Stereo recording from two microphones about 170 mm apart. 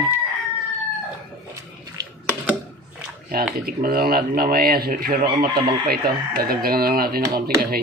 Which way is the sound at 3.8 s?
60° right (ahead or behind).